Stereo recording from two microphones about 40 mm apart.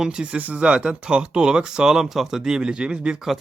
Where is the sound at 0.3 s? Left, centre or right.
Right.